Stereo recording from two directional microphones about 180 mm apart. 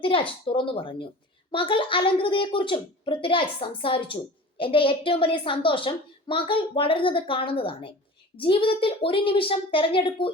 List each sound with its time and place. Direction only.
0.0 s speech: 30° left (ahead or behind)